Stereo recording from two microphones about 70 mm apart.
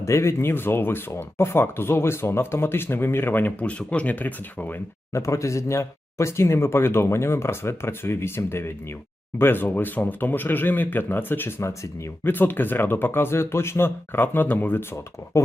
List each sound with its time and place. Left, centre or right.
0.0 s speech: left
3.7 s speech: centre
5.1 s speech: left
15.3 s speech: left